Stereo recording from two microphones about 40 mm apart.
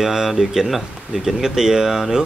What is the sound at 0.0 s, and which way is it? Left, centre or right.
Speech, centre.